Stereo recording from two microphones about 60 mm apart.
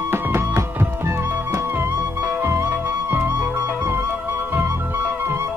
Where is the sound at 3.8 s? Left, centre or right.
Right.